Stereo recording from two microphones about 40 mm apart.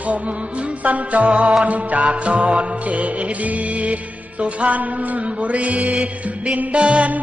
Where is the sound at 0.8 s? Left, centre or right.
Right.